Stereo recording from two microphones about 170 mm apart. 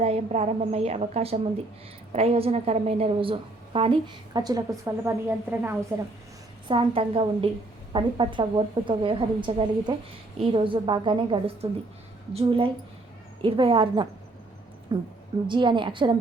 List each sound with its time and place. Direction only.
0.0 s a woman's voice: 40° right (ahead or behind); by 5.7 s 15° right (ahead or behind)
6.7 s a woman's voice: 30° right (ahead or behind)